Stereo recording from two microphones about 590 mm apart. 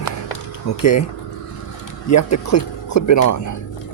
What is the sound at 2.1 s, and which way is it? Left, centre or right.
Speech, left.